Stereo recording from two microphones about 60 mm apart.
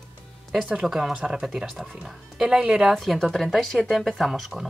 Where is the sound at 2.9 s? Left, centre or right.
Centre.